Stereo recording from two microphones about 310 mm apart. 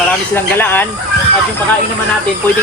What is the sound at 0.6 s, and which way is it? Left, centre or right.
Speech, centre.